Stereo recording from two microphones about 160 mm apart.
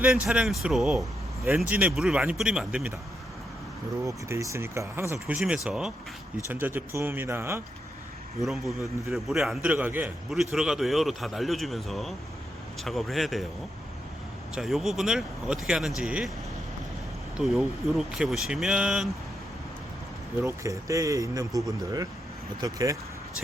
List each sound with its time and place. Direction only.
0.0 s a man's voice: 5° right (ahead or behind)
4.0 s speech: 20° right (ahead or behind)
5.2 s a man's voice: 5° right (ahead or behind)
8.4 s a man's voice: centre (ahead or behind)
14.5 s a man's voice: centre (ahead or behind)
17.3 s a man's voice: 5° right (ahead or behind)
20.4 s speech: 20° right (ahead or behind)